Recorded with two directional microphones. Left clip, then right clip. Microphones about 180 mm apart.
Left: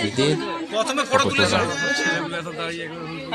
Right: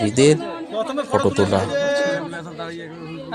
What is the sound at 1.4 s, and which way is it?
Speech, 20° right (ahead or behind).